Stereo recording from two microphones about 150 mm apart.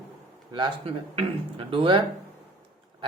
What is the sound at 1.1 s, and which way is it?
Speech, 40° right (ahead or behind).